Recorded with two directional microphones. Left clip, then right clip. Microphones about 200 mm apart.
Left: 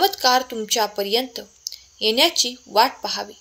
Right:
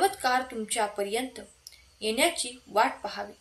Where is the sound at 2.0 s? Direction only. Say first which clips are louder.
Left 9 dB; 40° left (ahead or behind).